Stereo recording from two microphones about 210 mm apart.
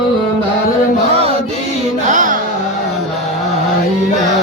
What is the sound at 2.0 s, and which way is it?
Music, 35° right (ahead or behind).